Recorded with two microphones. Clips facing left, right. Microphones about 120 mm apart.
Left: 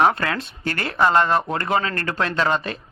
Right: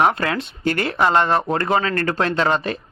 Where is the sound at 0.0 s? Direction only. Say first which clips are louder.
Right 1 dB; 30° right (ahead or behind).